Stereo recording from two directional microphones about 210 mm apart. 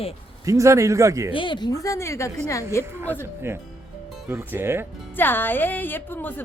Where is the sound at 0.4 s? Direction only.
15° right (ahead or behind).